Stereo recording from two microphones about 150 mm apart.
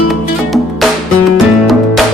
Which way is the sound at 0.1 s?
Centre (ahead or behind).